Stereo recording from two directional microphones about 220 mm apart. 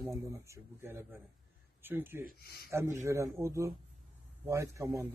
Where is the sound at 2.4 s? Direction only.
45° left (ahead or behind).